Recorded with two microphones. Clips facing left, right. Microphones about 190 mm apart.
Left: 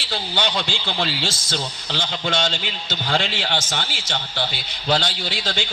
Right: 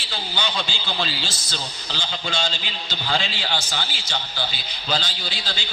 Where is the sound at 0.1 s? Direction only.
60° left (ahead or behind).